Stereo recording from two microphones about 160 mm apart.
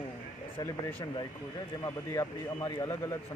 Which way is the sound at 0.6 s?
15° left (ahead or behind).